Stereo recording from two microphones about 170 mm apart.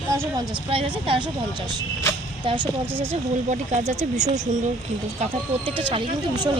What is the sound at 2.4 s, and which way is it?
Speech, 30° right (ahead or behind).